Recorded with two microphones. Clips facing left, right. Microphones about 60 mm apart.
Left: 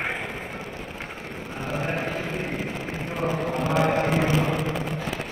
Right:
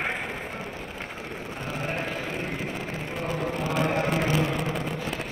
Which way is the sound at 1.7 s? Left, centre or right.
Left.